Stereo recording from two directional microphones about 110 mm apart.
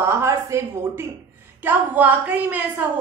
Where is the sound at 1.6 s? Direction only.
15° right (ahead or behind).